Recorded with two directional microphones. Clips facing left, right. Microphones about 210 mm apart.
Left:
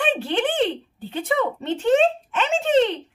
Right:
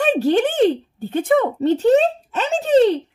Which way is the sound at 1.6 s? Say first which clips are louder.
Right 2 dB; 40° right (ahead or behind).